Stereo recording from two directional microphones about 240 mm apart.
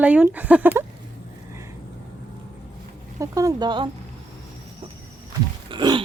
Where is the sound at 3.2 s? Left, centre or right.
Centre.